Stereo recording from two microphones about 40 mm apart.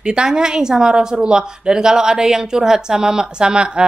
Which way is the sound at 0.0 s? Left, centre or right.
Right.